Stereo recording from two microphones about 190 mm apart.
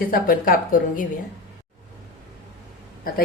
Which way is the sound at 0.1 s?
50° left (ahead or behind).